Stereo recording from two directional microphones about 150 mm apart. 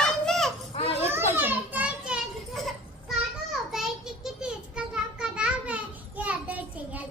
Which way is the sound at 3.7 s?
5° right (ahead or behind).